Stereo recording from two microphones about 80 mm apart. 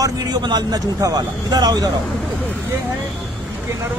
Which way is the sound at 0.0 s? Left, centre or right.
Right.